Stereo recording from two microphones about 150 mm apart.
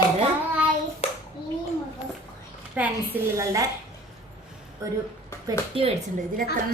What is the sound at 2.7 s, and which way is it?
Speech, 10° right (ahead or behind).